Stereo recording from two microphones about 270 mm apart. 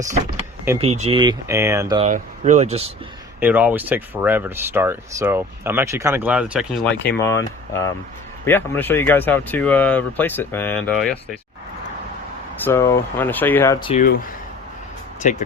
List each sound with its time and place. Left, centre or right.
0.8 s speech: right
2.0 s speech: right
3.4 s speech: centre
12.6 s speech: centre
13.9 s speech: left